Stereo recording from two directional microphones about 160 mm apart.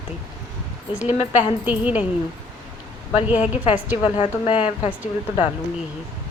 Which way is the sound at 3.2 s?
10° right (ahead or behind).